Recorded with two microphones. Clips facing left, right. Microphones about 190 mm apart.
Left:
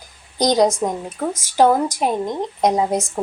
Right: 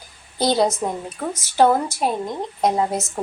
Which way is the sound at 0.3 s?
15° left (ahead or behind).